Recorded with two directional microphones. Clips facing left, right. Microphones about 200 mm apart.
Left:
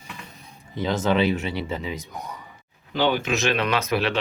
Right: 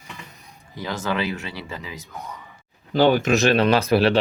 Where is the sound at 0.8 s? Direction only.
20° left (ahead or behind).